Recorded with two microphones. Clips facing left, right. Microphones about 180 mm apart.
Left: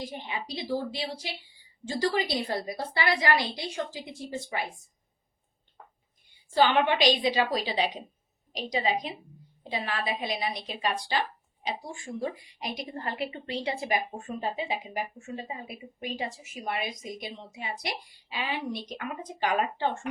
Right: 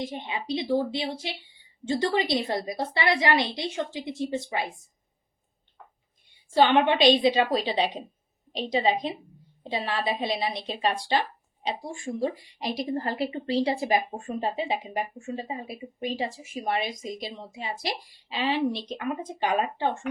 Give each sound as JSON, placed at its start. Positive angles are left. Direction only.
{"t": 0.0, "sound": "a woman's voice", "side_deg": -25}
{"t": 6.5, "sound": "a woman's voice", "side_deg": -25}